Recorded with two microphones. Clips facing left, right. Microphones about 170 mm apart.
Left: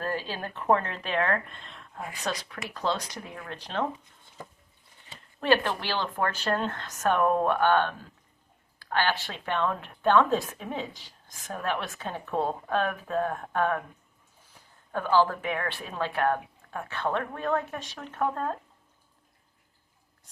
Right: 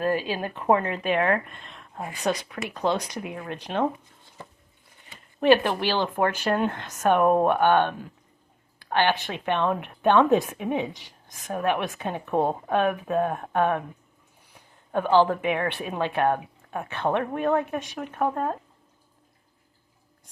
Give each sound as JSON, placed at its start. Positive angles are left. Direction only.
{"t": 0.0, "sound": "a woman's voice", "side_deg": -15}
{"t": 5.4, "sound": "speech", "side_deg": -15}
{"t": 14.9, "sound": "a woman's voice", "side_deg": -20}